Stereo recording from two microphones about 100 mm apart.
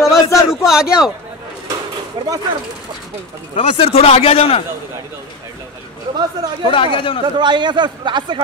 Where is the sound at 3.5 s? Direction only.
60° left (ahead or behind); by 4.6 s 80° left.